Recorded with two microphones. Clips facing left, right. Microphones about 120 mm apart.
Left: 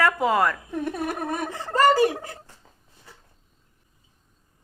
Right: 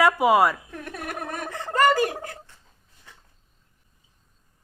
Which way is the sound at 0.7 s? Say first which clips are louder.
Left 7 dB; 20° left (ahead or behind).